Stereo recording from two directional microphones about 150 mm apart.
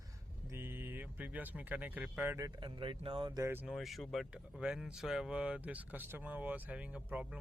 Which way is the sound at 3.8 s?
Centre (ahead or behind).